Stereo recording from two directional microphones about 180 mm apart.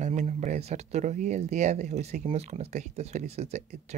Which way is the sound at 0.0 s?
40° right (ahead or behind).